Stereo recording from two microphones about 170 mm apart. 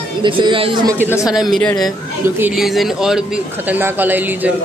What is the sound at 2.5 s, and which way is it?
A man's voice, centre (ahead or behind).